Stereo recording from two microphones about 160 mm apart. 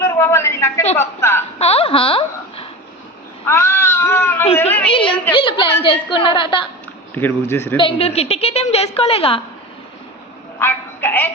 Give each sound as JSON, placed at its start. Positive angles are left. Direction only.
{"t": 0.0, "sound": "a woman's voice", "side_deg": 15}
{"t": 1.5, "sound": "speech", "side_deg": 40}
{"t": 3.4, "sound": "cat", "side_deg": 15}
{"t": 4.9, "sound": "a woman's voice", "side_deg": 30}
{"t": 7.1, "sound": "speech", "side_deg": 10}
{"t": 7.8, "sound": "a woman's voice", "side_deg": 35}
{"t": 10.6, "sound": "a sound", "side_deg": 15}